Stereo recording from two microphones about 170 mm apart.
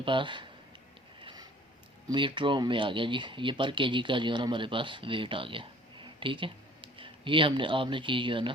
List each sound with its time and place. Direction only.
0.0 s speech: 30° right (ahead or behind)
1.2 s a sound: 25° right (ahead or behind)
2.0 s speech: 30° right (ahead or behind)